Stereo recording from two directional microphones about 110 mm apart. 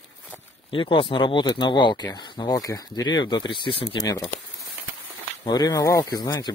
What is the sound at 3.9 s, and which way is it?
Speech, 35° left (ahead or behind).